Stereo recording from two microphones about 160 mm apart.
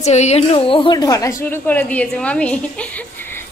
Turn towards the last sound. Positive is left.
turn(degrees=10)  # may be behind; listen again after turning